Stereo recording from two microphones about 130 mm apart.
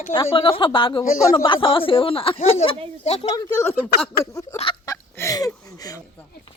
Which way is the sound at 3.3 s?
20° left (ahead or behind).